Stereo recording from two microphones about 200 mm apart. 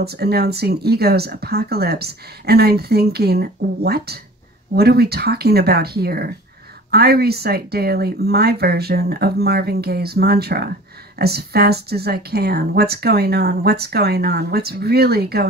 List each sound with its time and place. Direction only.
0.0 s speech: 50° right (ahead or behind)